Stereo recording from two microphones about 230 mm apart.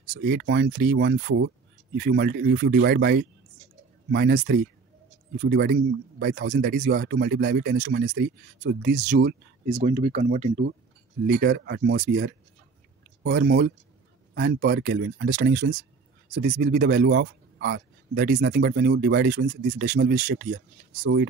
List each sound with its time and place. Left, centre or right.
0.1 s a man's voice: right
5.5 s a man's voice: right
9.7 s speech: right
11.2 s a man's voice: right
16.3 s a man's voice: right